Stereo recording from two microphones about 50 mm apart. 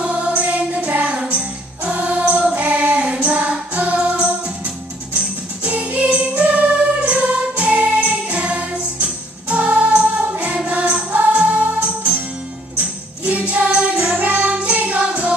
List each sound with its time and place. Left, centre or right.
0.0 s music: right
14.1 s music: right